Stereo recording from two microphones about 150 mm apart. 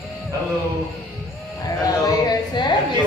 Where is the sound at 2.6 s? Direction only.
30° left (ahead or behind).